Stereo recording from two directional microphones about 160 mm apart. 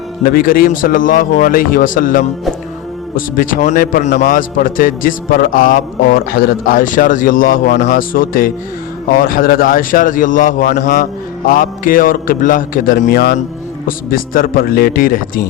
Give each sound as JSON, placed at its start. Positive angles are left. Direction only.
{"t": 0.3, "sound": "a man's voice", "side_deg": 65}
{"t": 13.8, "sound": "a man's voice", "side_deg": 60}